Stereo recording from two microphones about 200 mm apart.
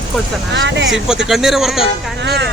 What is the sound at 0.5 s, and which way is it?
Speech, 60° right (ahead or behind).